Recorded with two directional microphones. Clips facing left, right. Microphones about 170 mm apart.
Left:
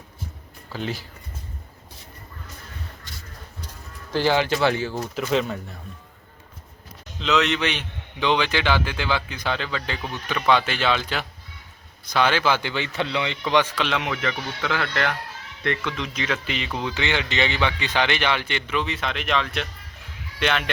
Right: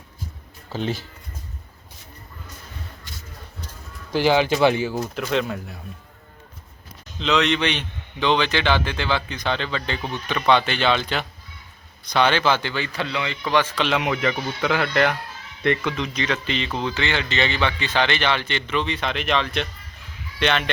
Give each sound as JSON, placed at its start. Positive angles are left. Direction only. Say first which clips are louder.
{"t": 0.7, "sound": "speech", "louder": "right 3 dB", "side_deg": -25}
{"t": 4.1, "sound": "speech", "louder": "right 2 dB", "side_deg": -15}
{"t": 4.9, "sound": "speech", "louder": "even", "side_deg": 0}
{"t": 7.2, "sound": "a man's voice", "louder": "right 1 dB", "side_deg": 5}
{"t": 13.7, "sound": "speech", "louder": "right 3 dB", "side_deg": 0}
{"t": 14.0, "sound": "speech", "louder": "right 4 dB", "side_deg": -15}
{"t": 16.0, "sound": "a man's voice", "louder": "right 2 dB", "side_deg": 5}